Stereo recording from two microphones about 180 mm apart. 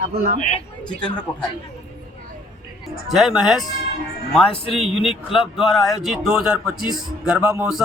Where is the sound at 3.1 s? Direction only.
Centre (ahead or behind).